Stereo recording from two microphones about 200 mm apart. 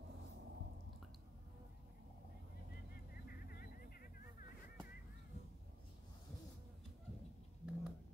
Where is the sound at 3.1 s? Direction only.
45° left (ahead or behind).